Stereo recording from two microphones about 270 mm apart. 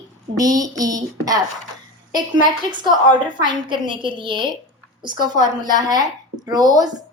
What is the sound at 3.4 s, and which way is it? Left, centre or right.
A woman's voice, centre.